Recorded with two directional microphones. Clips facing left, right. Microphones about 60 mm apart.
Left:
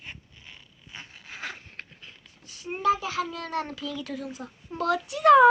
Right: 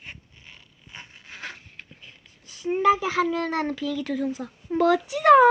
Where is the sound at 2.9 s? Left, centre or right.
Right.